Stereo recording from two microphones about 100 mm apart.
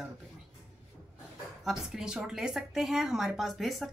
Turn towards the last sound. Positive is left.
turn(degrees=0)  # may be behind; listen again after turning